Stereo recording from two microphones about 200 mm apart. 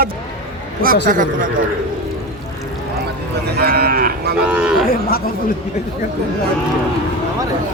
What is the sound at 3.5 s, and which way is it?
Speech, 50° right (ahead or behind).